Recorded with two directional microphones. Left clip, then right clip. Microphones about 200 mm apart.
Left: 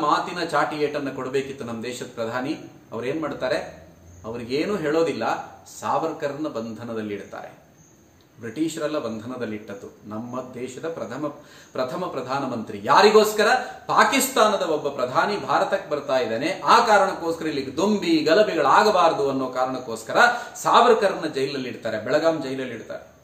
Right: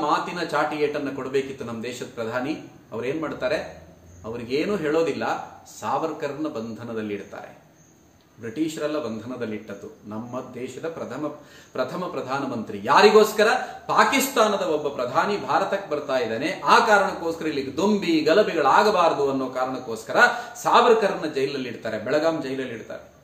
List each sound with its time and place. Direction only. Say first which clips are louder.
0.0 s speech: left 2 dB; 15° left (ahead or behind)
8.7 s speech: left 1 dB; 10° left (ahead or behind)
10.8 s speech: left 1 dB; 15° left (ahead or behind)